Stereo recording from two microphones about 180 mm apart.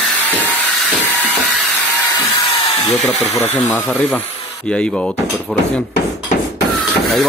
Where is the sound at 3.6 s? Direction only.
10° left (ahead or behind).